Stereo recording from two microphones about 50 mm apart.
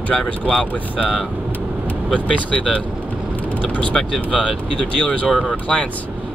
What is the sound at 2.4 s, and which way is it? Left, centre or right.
Speech, left.